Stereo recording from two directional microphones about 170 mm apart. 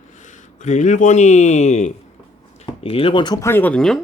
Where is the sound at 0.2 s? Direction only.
45° left (ahead or behind); by 4.0 s 5° left (ahead or behind).